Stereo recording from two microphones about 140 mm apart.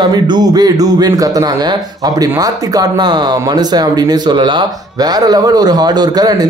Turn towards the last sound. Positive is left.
turn(degrees=-30)  # may be behind; listen again after turning